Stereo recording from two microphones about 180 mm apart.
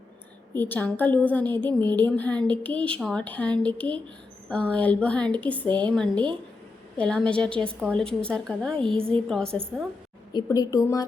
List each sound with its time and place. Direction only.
0.5 s a woman's voice: 10° left (ahead or behind)
10.3 s a woman's voice: 20° left (ahead or behind)